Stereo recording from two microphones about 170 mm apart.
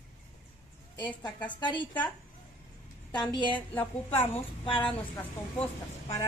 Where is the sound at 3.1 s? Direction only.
25° left (ahead or behind).